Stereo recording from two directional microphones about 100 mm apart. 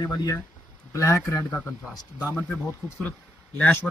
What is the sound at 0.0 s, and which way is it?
Speech, 35° left (ahead or behind).